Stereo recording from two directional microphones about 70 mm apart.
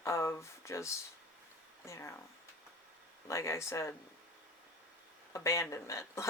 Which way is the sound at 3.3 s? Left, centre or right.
Left.